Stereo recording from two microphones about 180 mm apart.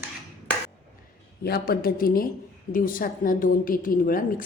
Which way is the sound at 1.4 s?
60° left (ahead or behind).